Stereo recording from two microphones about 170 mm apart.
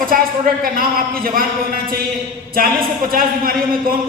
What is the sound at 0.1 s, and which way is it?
A man's voice, 55° right (ahead or behind).